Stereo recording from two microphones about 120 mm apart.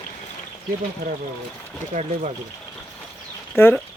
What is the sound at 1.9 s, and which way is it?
Speech, 90° right.